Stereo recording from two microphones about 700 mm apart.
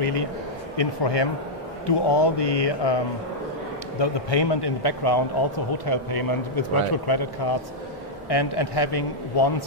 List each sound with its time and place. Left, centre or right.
0.0 s speech: left
4.0 s speech: left